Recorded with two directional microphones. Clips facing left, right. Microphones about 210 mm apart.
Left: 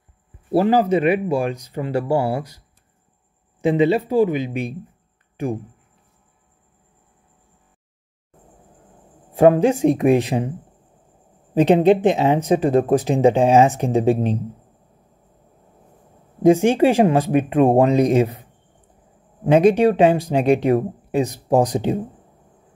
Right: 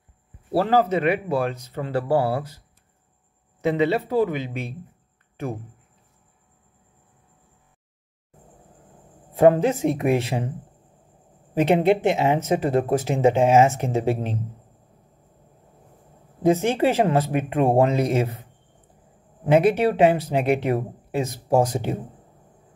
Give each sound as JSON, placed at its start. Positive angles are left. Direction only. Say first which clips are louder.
{"t": 0.6, "sound": "speech", "louder": "left 4 dB", "side_deg": 15}
{"t": 3.7, "sound": "speech", "louder": "left 4 dB", "side_deg": 15}
{"t": 9.3, "sound": "speech", "louder": "left 3 dB", "side_deg": 15}
{"t": 11.5, "sound": "speech", "louder": "left 4 dB", "side_deg": 20}
{"t": 16.4, "sound": "speech", "louder": "left 5 dB", "side_deg": 15}
{"t": 19.5, "sound": "speech", "louder": "left 4 dB", "side_deg": 15}